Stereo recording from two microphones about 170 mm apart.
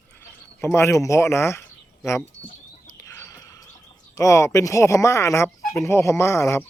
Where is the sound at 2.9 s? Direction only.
15° left (ahead or behind).